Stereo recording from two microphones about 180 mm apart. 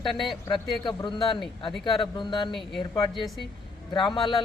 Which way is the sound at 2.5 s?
Centre (ahead or behind).